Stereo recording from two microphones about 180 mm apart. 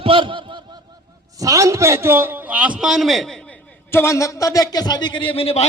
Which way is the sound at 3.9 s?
15° left (ahead or behind).